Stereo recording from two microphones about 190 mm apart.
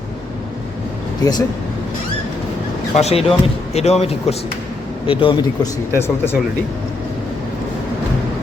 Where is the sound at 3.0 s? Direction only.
30° left (ahead or behind); by 6.3 s 10° left (ahead or behind).